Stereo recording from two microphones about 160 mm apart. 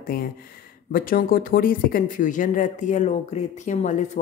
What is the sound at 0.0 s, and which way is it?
Speech, 65° left (ahead or behind).